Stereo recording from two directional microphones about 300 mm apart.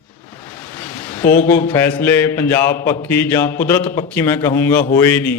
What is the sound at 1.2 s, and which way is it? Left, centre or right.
Speech, left.